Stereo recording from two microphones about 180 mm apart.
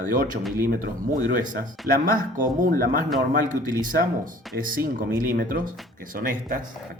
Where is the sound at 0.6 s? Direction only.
50° right (ahead or behind).